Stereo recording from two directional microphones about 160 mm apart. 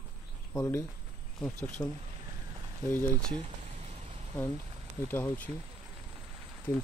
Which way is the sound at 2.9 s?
10° left (ahead or behind).